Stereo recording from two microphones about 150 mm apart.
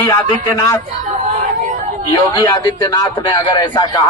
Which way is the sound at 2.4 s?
25° left (ahead or behind).